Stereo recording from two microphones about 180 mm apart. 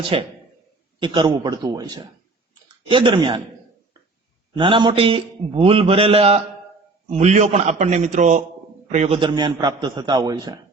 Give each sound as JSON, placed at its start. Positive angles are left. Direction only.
{"t": 0.1, "sound": "a man's voice", "side_deg": -35}
{"t": 4.5, "sound": "a man's voice", "side_deg": -25}